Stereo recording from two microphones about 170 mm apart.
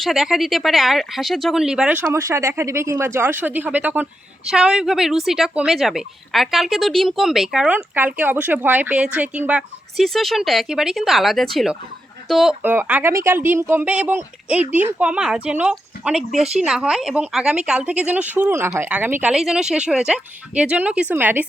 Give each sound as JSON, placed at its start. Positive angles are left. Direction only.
{"t": 0.0, "sound": "speech", "side_deg": 0}
{"t": 2.1, "sound": "speech", "side_deg": -15}
{"t": 12.6, "sound": "speech", "side_deg": -10}
{"t": 16.3, "sound": "speech", "side_deg": -40}
{"t": 16.6, "sound": "speech", "side_deg": -5}